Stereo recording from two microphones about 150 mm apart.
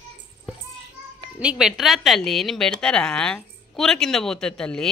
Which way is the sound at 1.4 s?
5° right (ahead or behind).